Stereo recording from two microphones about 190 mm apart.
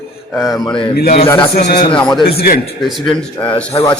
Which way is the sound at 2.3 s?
55° left (ahead or behind).